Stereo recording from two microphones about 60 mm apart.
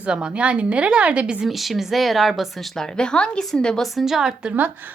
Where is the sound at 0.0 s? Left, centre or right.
Centre.